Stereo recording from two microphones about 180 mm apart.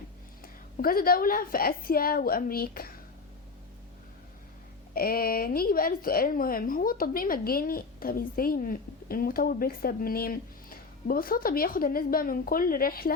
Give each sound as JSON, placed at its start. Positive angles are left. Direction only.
{"t": 0.4, "sound": "a woman's voice", "side_deg": 55}
{"t": 4.9, "sound": "a woman's voice", "side_deg": 55}